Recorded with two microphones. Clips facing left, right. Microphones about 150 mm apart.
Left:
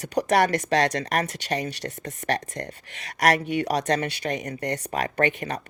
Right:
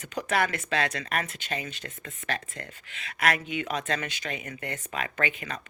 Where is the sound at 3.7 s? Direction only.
40° left (ahead or behind).